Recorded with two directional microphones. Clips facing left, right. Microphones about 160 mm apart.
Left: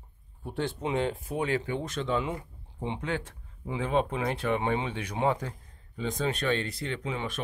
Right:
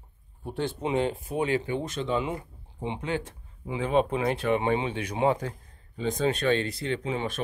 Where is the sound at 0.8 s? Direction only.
15° right (ahead or behind).